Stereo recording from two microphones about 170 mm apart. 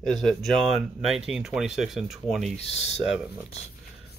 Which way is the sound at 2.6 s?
40° left (ahead or behind).